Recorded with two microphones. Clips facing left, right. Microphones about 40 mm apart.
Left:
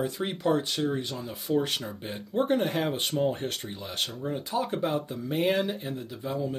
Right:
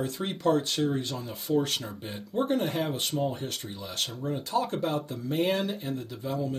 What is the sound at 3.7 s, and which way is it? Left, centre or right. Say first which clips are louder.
Speech: left 1 dB; centre.